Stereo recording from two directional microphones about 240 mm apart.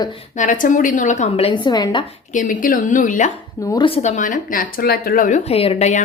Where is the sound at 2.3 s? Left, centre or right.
Left.